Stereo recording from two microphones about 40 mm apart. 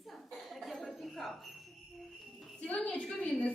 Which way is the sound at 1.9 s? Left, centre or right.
Centre.